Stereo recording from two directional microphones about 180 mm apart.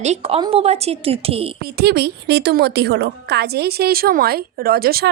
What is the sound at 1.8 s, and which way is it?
A woman's voice, 65° right (ahead or behind).